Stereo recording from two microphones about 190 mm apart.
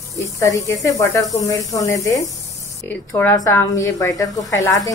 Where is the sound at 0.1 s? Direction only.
15° left (ahead or behind).